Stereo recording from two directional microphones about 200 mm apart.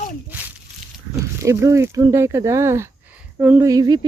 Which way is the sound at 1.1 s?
15° right (ahead or behind).